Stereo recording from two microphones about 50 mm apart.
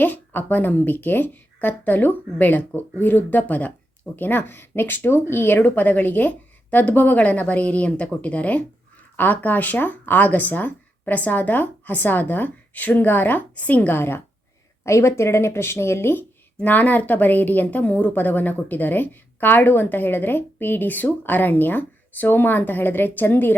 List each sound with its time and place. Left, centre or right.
0.0 s a woman's voice: left
9.1 s a woman's voice: left
14.8 s speech: left
16.6 s a woman's voice: left